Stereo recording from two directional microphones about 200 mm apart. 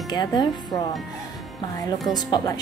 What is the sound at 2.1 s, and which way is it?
Speech, 20° left (ahead or behind).